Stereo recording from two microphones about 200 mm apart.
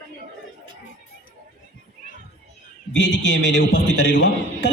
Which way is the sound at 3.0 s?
65° left (ahead or behind).